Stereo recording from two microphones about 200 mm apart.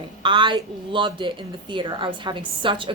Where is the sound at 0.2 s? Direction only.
25° right (ahead or behind).